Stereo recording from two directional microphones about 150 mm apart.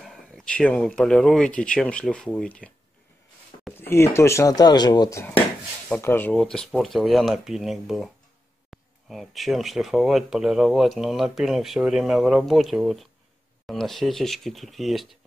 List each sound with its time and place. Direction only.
0.0 s speech: 5° left (ahead or behind)
3.7 s speech: 15° left (ahead or behind)
5.9 s speech: 15° left (ahead or behind)